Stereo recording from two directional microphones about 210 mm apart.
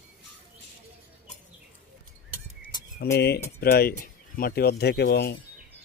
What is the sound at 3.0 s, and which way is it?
Speech, 50° left (ahead or behind).